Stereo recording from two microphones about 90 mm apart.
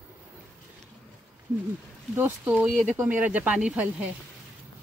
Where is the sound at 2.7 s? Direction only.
5° right (ahead or behind).